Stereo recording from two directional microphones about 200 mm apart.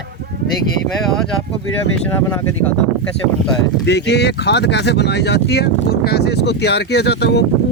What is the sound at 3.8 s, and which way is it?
Speech, 55° left (ahead or behind).